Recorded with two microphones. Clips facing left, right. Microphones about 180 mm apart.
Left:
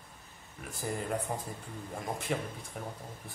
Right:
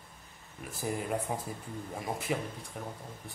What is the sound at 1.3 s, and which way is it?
Speech, 5° right (ahead or behind).